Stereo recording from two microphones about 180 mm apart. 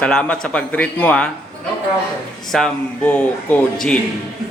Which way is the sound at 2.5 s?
5° left (ahead or behind).